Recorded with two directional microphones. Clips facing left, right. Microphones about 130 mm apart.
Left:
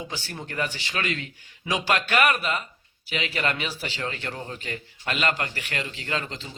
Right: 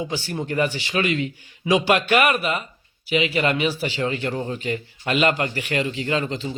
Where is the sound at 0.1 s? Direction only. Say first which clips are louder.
Right 9 dB; 15° right (ahead or behind).